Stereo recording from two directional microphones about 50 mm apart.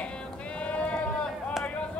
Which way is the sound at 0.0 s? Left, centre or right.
Left.